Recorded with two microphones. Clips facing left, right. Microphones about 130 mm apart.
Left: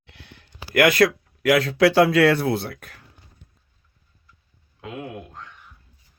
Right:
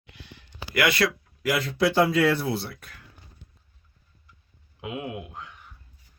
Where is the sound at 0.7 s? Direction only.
50° left (ahead or behind).